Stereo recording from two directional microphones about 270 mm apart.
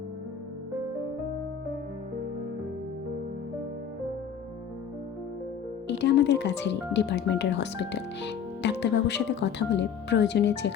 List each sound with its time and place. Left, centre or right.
6.0 s speech: left